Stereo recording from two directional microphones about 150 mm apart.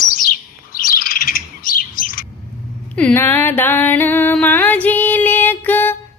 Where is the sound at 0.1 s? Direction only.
75° left (ahead or behind).